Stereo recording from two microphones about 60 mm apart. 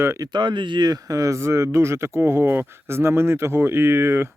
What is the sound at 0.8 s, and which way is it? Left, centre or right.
Speech, right.